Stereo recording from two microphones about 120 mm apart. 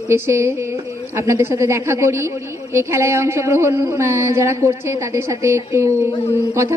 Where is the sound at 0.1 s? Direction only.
25° right (ahead or behind).